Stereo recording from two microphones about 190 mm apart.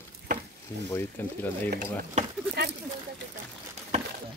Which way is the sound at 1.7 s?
55° right (ahead or behind).